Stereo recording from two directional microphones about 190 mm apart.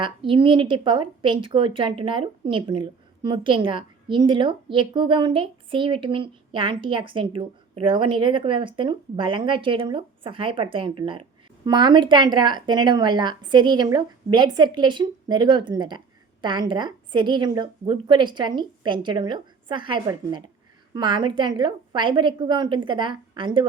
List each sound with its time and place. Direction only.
0.0 s a woman's voice: 25° right (ahead or behind)